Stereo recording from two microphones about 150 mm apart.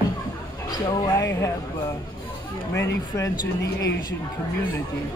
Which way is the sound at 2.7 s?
15° left (ahead or behind).